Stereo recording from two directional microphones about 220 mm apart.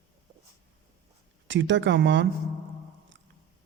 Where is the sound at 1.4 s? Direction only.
55° right (ahead or behind).